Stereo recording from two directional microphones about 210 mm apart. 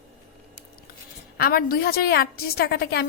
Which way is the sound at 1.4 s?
45° left (ahead or behind).